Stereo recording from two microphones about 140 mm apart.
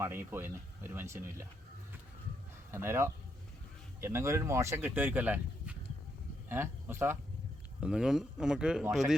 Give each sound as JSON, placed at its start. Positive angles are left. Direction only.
{"t": 0.0, "sound": "speech", "side_deg": -15}
{"t": 2.7, "sound": "speech", "side_deg": -20}
{"t": 7.8, "sound": "speech", "side_deg": -5}